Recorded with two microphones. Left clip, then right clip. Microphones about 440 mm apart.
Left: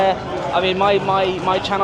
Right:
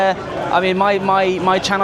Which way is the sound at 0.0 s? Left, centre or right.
Right.